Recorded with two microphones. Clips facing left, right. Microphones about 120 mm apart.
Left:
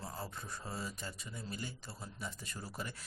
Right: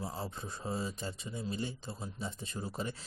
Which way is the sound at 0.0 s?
20° right (ahead or behind).